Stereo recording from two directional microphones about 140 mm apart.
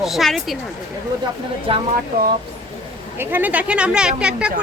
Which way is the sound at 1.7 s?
40° right (ahead or behind).